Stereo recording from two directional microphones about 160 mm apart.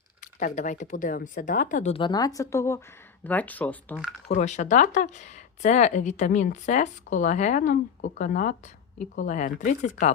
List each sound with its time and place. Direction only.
0.3 s speech: 55° left (ahead or behind)
1.9 s speech: 30° left (ahead or behind); by 3.9 s 10° left (ahead or behind)
4.3 s speech: 45° left (ahead or behind)